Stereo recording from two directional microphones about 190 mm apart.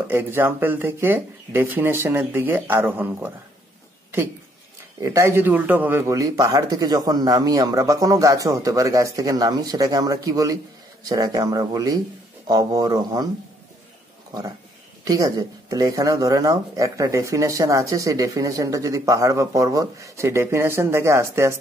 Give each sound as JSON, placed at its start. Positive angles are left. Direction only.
{"t": 0.1, "sound": "speech", "side_deg": -10}
{"t": 5.0, "sound": "speech", "side_deg": -15}
{"t": 15.0, "sound": "speech", "side_deg": -20}